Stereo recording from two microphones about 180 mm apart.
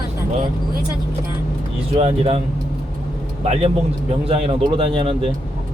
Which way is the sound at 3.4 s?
35° right (ahead or behind).